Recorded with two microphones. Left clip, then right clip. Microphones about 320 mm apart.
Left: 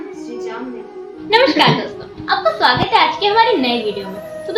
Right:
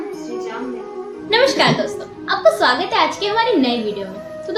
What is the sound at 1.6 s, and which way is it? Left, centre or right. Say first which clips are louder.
A woman's voice: left 2 dB; right.